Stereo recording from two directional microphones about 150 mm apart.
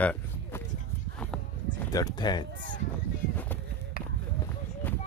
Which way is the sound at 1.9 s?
25° left (ahead or behind).